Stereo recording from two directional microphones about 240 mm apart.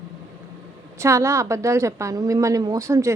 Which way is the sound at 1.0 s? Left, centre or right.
Centre.